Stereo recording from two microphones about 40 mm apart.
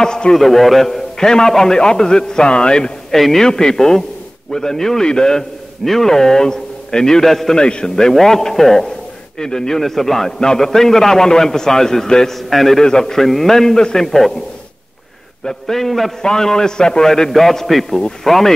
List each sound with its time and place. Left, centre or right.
0.0 s a man's voice: centre
0.4 s a man's voice: centre
1.1 s a man's voice: centre
3.1 s a man's voice: centre
7.5 s a man's voice: left
7.8 s a man's voice: centre
9.8 s a man's voice: centre
15.4 s a man's voice: centre